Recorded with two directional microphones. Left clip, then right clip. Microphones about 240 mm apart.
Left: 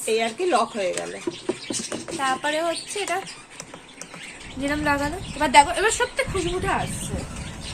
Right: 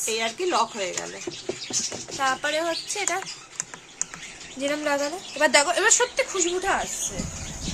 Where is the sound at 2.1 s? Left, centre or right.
Right.